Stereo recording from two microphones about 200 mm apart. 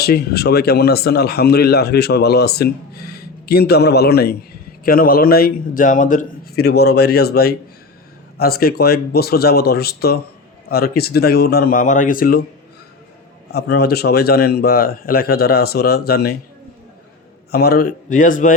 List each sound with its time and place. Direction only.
0.0 s speech: 50° left (ahead or behind)
13.5 s speech: 55° left (ahead or behind)
17.5 s speech: 50° left (ahead or behind)